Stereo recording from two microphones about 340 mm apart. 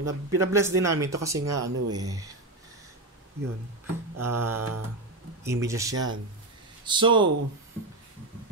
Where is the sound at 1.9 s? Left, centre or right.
Centre.